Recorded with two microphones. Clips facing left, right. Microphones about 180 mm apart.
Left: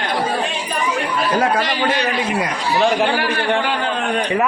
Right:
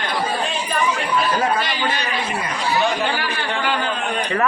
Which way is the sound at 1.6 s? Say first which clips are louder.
Left 4 dB; 90° left.